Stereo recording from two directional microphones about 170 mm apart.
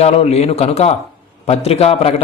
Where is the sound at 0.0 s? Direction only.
35° left (ahead or behind).